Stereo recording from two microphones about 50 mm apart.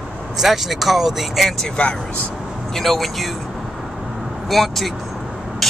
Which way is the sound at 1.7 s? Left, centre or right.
Left.